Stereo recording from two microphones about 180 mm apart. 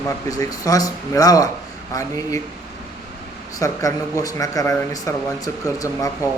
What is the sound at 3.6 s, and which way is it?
A man's voice, 20° left (ahead or behind).